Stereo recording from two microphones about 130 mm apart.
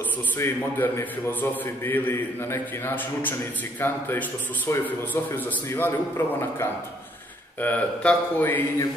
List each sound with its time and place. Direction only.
0.4 s a man's voice: 20° left (ahead or behind)